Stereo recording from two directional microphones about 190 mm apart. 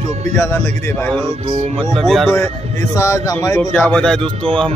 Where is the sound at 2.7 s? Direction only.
15° left (ahead or behind).